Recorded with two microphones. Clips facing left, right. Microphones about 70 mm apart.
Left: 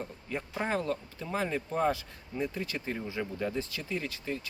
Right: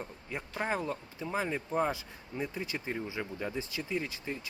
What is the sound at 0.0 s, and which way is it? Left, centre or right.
Speech, centre.